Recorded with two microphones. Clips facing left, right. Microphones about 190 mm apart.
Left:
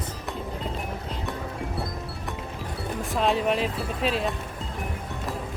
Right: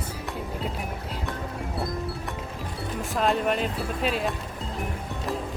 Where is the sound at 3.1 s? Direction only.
Centre (ahead or behind).